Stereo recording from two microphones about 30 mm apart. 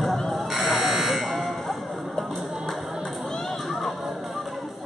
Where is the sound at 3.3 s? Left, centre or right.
Centre.